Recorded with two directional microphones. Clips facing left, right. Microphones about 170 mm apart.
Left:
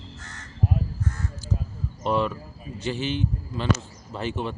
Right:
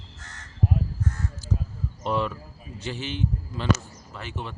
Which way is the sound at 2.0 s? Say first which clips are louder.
Left 3 dB; 20° left (ahead or behind).